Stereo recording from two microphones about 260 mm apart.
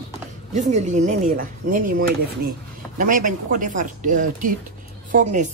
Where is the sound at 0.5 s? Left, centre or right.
Right.